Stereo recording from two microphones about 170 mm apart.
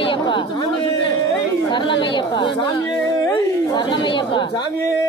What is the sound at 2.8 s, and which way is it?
Chatter, 20° left (ahead or behind).